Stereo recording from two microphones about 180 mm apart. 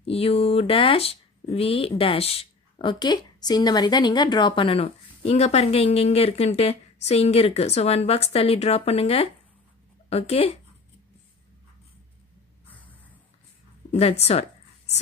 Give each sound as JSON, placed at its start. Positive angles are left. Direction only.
{"t": 0.0, "sound": "speech", "side_deg": 30}
{"t": 12.6, "sound": "a sound", "side_deg": 10}
{"t": 13.9, "sound": "speech", "side_deg": 35}